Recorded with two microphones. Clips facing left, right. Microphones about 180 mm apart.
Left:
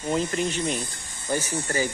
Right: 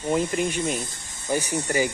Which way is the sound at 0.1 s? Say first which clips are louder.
Right 2 dB; 10° right (ahead or behind).